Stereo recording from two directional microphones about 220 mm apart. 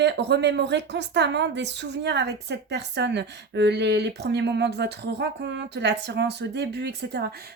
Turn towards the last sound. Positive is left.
turn(degrees=-45)  # may be behind; listen again after turning